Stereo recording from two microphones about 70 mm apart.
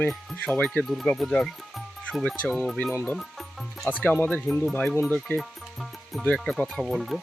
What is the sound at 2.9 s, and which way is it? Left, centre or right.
Speech, centre.